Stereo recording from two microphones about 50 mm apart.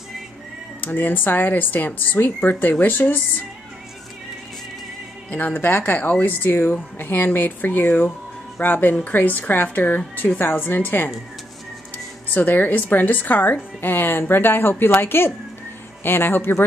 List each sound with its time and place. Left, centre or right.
0.7 s a woman's voice: left
5.3 s speech: left
12.4 s a woman's voice: left